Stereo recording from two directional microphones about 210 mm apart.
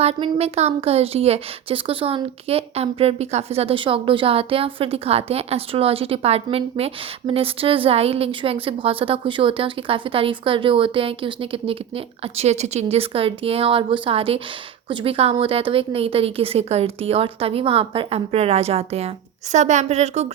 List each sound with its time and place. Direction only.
0.0 s speech: 30° right (ahead or behind)